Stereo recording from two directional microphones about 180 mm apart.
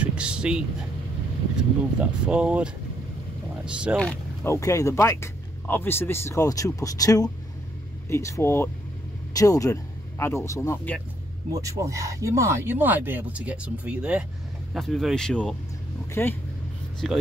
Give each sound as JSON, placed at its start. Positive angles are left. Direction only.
{"t": 0.0, "sound": "vehicle", "side_deg": -5}
{"t": 2.0, "sound": "speech", "side_deg": -5}
{"t": 4.0, "sound": "a sound", "side_deg": 5}
{"t": 4.5, "sound": "speech", "side_deg": 15}
{"t": 11.5, "sound": "speech", "side_deg": -15}
{"t": 17.0, "sound": "speech", "side_deg": 0}